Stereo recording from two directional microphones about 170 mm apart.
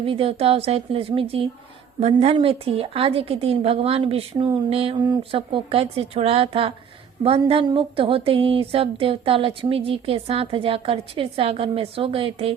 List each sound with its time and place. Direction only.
0.0 s a woman's voice: 30° right (ahead or behind)